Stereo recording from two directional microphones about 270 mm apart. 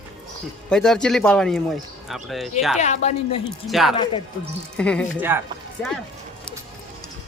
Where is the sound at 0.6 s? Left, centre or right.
Centre.